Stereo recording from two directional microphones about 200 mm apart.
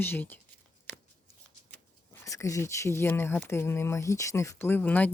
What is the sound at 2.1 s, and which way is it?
Speech, 15° left (ahead or behind).